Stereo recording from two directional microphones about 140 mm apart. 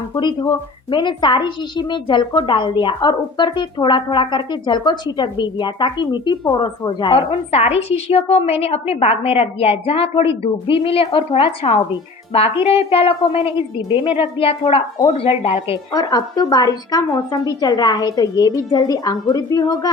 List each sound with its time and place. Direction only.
0.1 s a woman's voice: 30° left (ahead or behind)
15.9 s a woman's voice: 25° left (ahead or behind)